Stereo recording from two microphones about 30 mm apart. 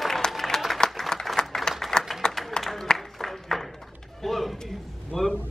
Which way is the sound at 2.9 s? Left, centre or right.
Left.